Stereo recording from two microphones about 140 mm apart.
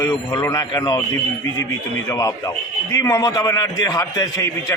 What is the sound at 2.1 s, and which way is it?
A man's voice, 20° left (ahead or behind).